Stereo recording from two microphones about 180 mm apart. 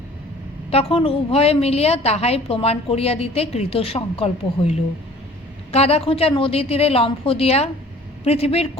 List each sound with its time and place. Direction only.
0.7 s a woman's voice: 35° left (ahead or behind)